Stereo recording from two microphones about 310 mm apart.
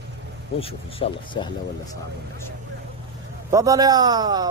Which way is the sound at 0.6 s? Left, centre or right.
Centre.